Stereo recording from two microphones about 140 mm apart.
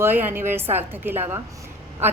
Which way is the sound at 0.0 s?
15° right (ahead or behind).